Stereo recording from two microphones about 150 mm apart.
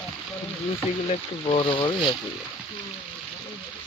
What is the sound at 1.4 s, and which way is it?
Speech, 35° left (ahead or behind).